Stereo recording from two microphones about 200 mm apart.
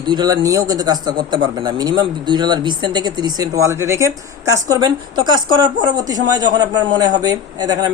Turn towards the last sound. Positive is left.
turn(degrees=-20)  # may be behind; listen again after turning